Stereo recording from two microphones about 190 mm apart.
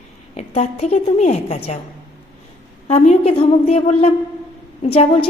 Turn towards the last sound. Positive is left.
turn(degrees=35)  # may be behind; listen again after turning